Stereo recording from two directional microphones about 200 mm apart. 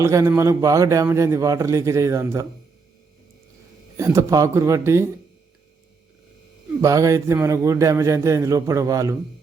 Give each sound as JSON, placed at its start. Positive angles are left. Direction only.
{"t": 0.0, "sound": "a man's voice", "side_deg": -15}
{"t": 3.9, "sound": "a man's voice", "side_deg": -15}
{"t": 6.8, "sound": "a man's voice", "side_deg": -15}